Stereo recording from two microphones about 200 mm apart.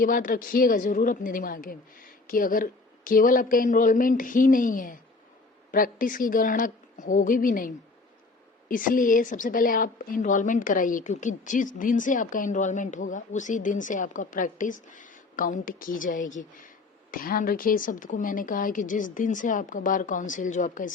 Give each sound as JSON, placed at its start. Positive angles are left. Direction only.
{"t": 0.0, "sound": "a woman's voice", "side_deg": 40}
{"t": 8.7, "sound": "a woman's voice", "side_deg": 45}